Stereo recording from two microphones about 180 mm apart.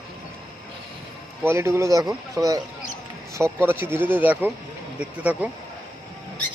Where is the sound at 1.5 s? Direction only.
15° right (ahead or behind).